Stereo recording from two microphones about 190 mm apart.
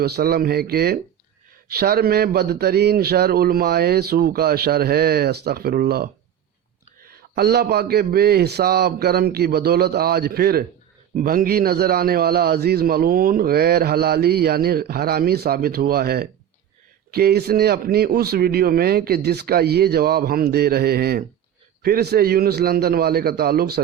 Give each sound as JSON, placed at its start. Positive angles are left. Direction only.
{"t": 0.0, "sound": "a man's voice", "side_deg": -55}
{"t": 7.3, "sound": "a man's voice", "side_deg": -55}